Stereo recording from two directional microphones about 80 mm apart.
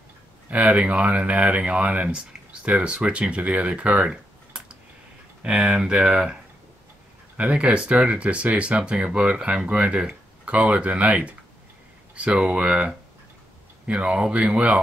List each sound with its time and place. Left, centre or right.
0.5 s speech: centre
7.3 s speech: centre